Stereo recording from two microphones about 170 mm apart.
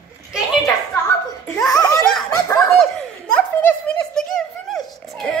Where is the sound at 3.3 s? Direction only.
5° left (ahead or behind).